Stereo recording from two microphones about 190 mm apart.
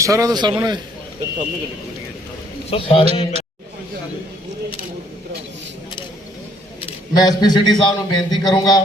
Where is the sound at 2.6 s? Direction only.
30° left (ahead or behind).